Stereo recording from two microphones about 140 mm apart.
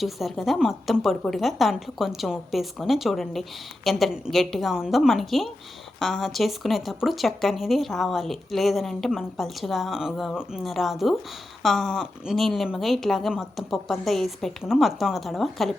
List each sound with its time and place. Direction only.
0.0 s speech: centre (ahead or behind)